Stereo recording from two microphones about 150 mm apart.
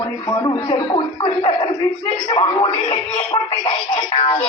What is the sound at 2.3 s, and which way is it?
Speech, 40° left (ahead or behind).